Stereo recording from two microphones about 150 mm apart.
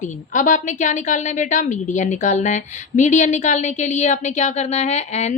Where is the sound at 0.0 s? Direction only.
55° left (ahead or behind).